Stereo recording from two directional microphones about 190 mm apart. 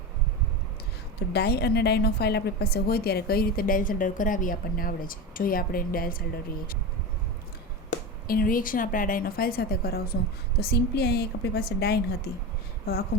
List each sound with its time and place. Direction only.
1.3 s a woman's voice: 60° left (ahead or behind)
7.9 s a woman's voice: 50° left (ahead or behind)